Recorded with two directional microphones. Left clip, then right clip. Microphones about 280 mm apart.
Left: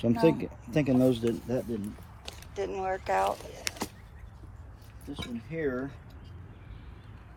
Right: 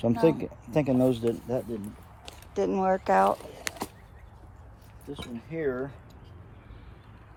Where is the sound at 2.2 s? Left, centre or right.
Centre.